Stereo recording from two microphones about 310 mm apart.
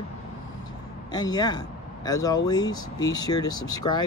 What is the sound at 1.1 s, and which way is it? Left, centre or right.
Speech, centre.